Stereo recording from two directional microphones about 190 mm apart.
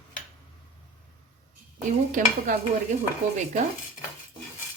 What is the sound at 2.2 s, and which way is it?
Dishes, 40° right (ahead or behind).